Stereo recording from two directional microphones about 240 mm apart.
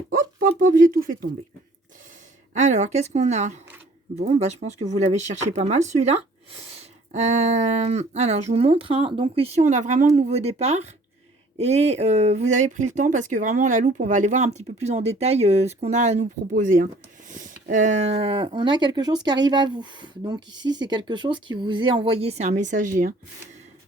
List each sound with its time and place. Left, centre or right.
0.1 s speech: right
2.5 s speech: right